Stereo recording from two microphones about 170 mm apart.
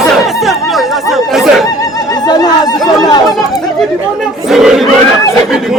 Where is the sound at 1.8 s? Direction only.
25° left (ahead or behind).